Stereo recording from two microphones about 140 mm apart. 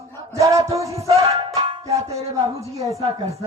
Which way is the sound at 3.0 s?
45° right (ahead or behind).